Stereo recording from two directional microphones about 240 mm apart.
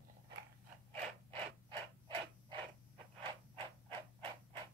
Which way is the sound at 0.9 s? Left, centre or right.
Right.